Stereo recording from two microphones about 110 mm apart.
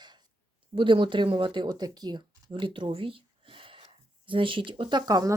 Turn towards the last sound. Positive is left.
turn(degrees=-40)  # may be behind; listen again after turning